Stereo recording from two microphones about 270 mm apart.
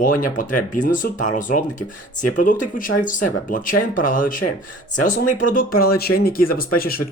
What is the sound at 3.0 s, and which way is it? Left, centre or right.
Speech, left.